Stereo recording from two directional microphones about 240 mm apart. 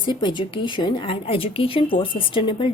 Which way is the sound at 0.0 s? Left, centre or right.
Centre.